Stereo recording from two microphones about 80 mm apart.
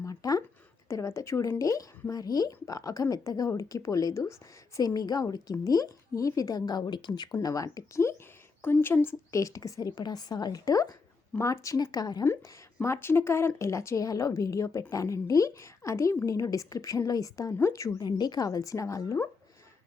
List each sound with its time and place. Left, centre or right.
0.0 s a sound: left
0.9 s a woman's voice: left
4.9 s a woman's voice: left
7.3 s a woman's voice: left
8.6 s speech: left
9.3 s a woman's voice: left
11.3 s a woman's voice: left
12.8 s a woman's voice: left
18.0 s a woman's voice: left